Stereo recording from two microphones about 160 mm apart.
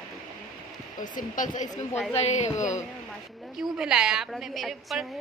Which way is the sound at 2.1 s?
40° left (ahead or behind).